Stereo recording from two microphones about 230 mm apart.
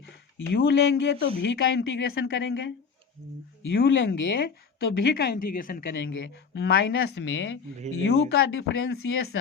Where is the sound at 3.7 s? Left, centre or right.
Left.